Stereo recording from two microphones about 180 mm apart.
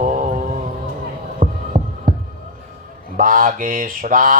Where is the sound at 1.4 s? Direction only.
45° right (ahead or behind).